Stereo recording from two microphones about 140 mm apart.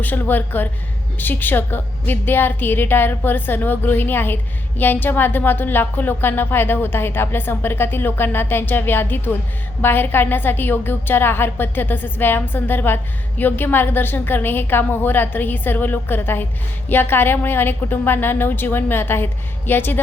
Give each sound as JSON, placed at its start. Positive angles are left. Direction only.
{"t": 0.0, "sound": "a woman's voice", "side_deg": 15}